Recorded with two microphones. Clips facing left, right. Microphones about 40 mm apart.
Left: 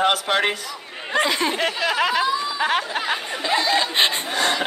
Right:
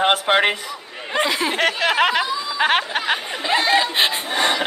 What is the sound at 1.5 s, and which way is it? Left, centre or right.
Speech, right.